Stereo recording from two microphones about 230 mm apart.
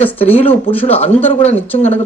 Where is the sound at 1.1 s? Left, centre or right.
Left.